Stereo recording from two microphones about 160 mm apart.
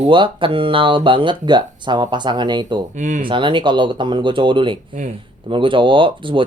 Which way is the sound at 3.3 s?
30° right (ahead or behind).